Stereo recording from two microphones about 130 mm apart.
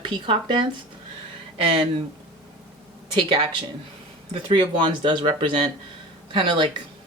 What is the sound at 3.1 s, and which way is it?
Speech, 45° right (ahead or behind).